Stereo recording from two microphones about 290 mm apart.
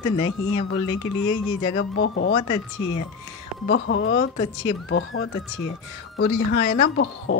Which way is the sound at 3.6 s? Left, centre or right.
Left.